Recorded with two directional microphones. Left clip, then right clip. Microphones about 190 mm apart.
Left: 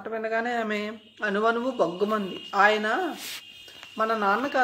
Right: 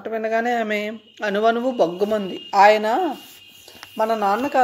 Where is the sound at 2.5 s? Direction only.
30° right (ahead or behind).